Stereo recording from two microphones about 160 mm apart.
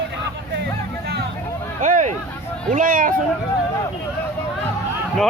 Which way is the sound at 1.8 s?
55° right (ahead or behind).